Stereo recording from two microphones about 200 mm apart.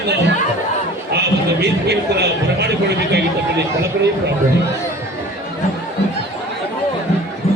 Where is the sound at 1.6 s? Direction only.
55° right (ahead or behind).